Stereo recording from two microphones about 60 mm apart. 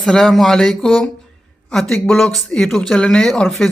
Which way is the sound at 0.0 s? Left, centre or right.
Centre.